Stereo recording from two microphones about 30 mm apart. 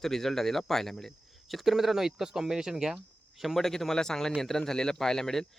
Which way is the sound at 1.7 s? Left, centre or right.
Centre.